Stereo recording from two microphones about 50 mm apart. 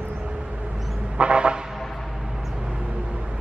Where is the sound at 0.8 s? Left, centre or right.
Centre.